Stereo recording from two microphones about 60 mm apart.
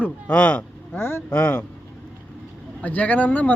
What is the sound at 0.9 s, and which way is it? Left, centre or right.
Speech, left.